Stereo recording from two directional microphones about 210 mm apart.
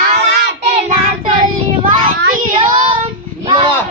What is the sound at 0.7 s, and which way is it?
Child singing, 30° right (ahead or behind).